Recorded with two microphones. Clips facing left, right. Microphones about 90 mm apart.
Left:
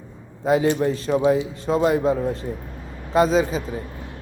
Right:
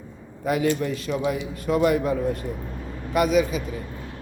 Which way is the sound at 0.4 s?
25° left (ahead or behind).